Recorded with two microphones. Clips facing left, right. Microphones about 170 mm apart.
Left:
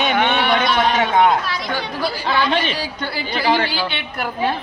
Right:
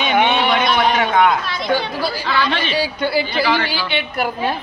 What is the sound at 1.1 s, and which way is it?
Chatter, 30° left (ahead or behind).